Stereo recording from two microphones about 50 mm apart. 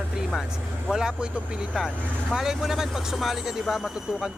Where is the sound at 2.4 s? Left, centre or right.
Centre.